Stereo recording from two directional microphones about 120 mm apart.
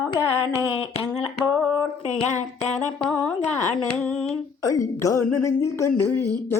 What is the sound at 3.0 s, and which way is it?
Speech, 10° left (ahead or behind).